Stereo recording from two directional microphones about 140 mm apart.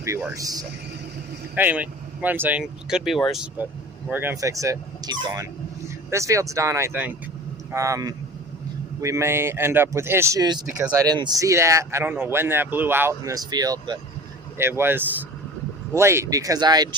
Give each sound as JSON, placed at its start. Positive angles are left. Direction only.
{"t": 0.3, "sound": "speech", "side_deg": -25}
{"t": 1.5, "sound": "speech", "side_deg": -10}
{"t": 4.1, "sound": "speech", "side_deg": -15}
{"t": 14.6, "sound": "speech", "side_deg": -15}